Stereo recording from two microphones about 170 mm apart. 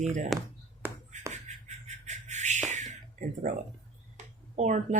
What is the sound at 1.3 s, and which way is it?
Music, 45° right (ahead or behind).